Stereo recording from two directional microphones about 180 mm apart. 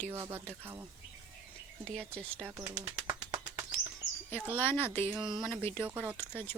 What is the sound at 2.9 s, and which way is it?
Bird, 15° right (ahead or behind).